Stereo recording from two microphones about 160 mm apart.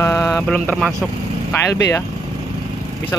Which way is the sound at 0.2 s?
5° left (ahead or behind).